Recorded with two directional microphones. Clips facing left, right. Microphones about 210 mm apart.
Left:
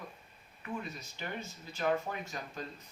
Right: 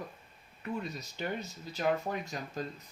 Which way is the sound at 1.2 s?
40° right (ahead or behind).